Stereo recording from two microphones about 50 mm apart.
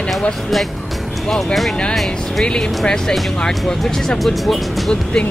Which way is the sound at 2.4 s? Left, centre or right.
Centre.